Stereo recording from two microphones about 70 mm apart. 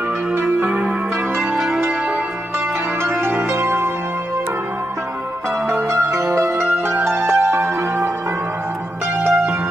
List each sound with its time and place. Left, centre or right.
0.3 s music: right
1.7 s music: right
3.0 s music: right
5.7 s music: right
9.2 s music: right